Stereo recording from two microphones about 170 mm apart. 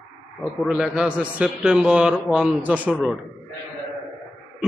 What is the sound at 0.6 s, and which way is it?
A man's voice, 5° right (ahead or behind).